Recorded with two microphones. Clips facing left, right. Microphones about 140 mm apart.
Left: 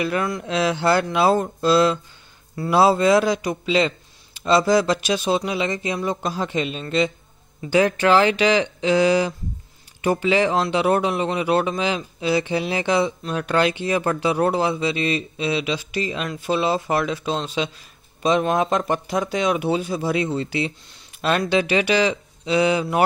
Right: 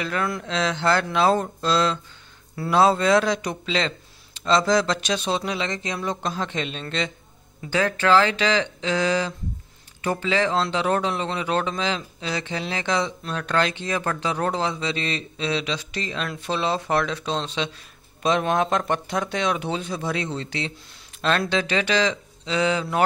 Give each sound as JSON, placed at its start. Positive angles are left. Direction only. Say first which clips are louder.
{"t": 0.0, "sound": "speech", "louder": "left 3 dB", "side_deg": 10}